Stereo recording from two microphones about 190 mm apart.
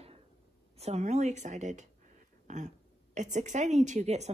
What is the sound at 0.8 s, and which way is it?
A woman's voice, 35° right (ahead or behind).